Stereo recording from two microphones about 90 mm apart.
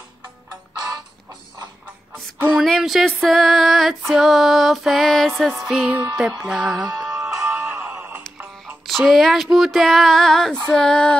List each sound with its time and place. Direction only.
0.7 s music: 50° right (ahead or behind)
2.5 s music: centre (ahead or behind)
5.7 s a sound: 10° right (ahead or behind)
6.1 s music: 5° right (ahead or behind)
7.2 s music: 20° right (ahead or behind)
8.8 s music: centre (ahead or behind)
10.7 s a sound: 10° left (ahead or behind)